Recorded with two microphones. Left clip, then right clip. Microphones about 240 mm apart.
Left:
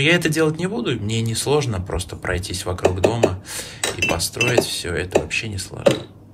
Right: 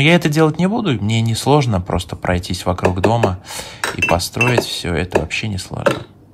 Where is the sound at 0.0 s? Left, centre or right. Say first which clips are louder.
Right 4 dB; right.